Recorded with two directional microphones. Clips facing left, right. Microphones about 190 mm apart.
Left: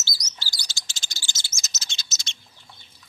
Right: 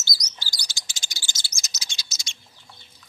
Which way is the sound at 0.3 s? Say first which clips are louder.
Even; 15° right (ahead or behind).